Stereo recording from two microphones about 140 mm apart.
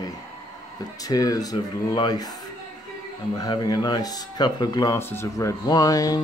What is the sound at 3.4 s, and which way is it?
Speech, 30° left (ahead or behind).